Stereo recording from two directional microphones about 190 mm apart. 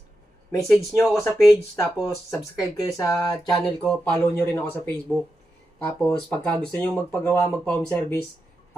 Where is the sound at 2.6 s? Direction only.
20° left (ahead or behind).